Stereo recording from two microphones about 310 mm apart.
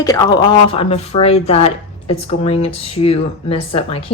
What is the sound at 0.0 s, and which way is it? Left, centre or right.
A woman's voice, centre.